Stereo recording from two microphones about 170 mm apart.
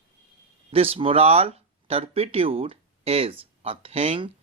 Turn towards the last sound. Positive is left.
turn(degrees=-35)  # may be behind; listen again after turning